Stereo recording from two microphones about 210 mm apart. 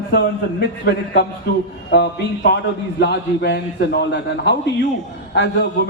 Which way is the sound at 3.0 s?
55° left (ahead or behind).